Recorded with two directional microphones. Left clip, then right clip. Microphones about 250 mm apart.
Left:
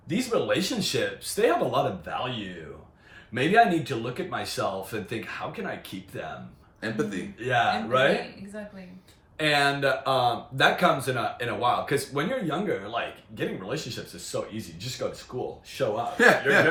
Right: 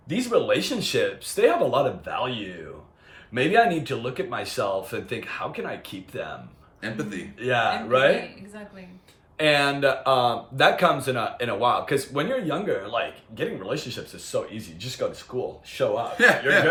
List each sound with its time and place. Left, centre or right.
0.1 s speech: centre
3.3 s speech: centre
6.8 s a man's voice: centre
7.4 s speech: centre
9.4 s speech: centre
16.1 s speech: centre